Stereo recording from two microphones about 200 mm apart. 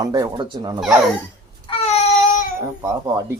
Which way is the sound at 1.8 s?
30° left (ahead or behind).